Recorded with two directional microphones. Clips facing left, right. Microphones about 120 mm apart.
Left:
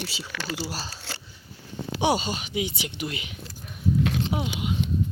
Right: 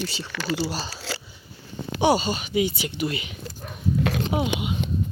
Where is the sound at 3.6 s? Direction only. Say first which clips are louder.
Even; 55° right (ahead or behind).